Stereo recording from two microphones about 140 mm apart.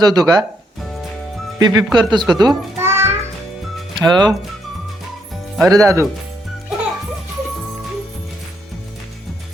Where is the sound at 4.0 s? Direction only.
30° right (ahead or behind).